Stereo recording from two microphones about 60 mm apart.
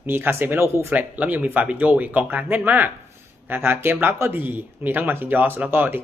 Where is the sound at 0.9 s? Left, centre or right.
Right.